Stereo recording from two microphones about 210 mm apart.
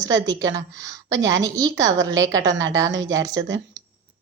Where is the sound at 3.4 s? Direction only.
60° right (ahead or behind).